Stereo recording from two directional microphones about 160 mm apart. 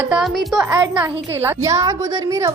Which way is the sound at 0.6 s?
25° right (ahead or behind).